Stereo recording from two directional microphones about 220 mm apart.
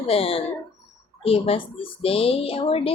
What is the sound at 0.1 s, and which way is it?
A woman's voice, 25° left (ahead or behind).